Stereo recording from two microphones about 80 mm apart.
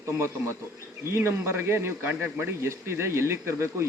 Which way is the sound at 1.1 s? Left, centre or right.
Right.